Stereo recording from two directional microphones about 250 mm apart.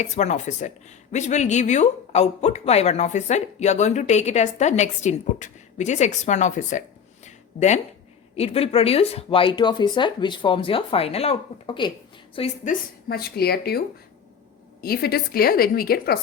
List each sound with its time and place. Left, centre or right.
0.0 s speech: left
7.3 s a sound: left
8.4 s speech: left
13.1 s a woman's voice: left